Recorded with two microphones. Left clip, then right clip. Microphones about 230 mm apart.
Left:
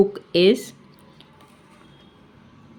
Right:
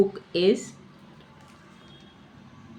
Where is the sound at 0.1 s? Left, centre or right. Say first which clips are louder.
Left 5 dB; left.